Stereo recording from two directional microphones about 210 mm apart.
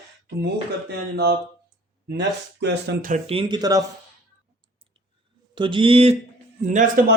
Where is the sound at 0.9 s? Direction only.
50° right (ahead or behind).